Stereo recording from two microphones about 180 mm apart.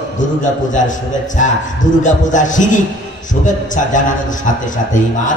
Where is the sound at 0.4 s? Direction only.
45° left (ahead or behind).